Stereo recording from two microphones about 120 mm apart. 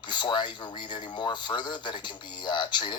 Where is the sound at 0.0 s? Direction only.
40° left (ahead or behind).